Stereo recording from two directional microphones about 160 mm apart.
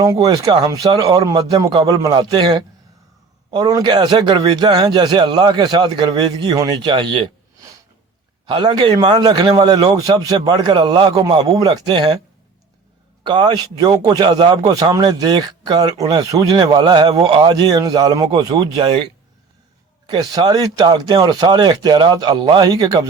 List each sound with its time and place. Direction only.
0.0 s a man's voice: 20° right (ahead or behind)
13.2 s a man's voice: 30° right (ahead or behind)
20.1 s a man's voice: 25° right (ahead or behind)